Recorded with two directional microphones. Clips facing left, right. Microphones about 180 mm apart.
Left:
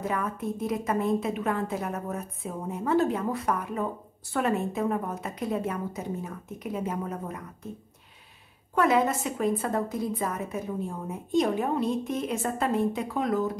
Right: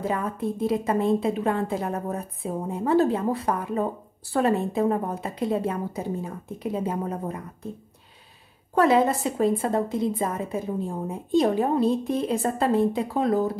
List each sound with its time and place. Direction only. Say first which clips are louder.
0.0 s a woman's voice: right 3 dB; 30° right (ahead or behind)
8.7 s a woman's voice: right 4 dB; 30° right (ahead or behind)